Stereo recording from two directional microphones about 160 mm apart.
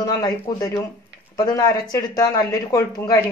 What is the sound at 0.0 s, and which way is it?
Speech, 25° left (ahead or behind).